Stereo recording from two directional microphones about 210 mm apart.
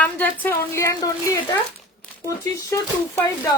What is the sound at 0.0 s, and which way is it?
Speech, 10° left (ahead or behind).